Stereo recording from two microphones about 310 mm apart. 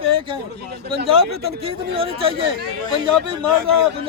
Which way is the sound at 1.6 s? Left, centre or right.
Centre.